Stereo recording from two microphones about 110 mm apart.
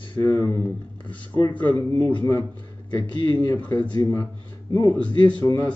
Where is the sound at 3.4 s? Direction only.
15° left (ahead or behind).